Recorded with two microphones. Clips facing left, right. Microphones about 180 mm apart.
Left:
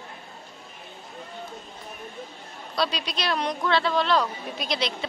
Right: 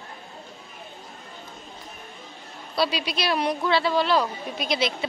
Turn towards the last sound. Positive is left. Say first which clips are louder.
# right 3 dB
turn(degrees=-5)  # may be behind; listen again after turning